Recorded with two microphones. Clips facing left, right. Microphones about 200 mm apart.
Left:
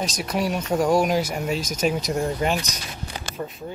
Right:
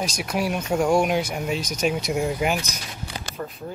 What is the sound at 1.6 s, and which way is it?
Speech, 45° left (ahead or behind).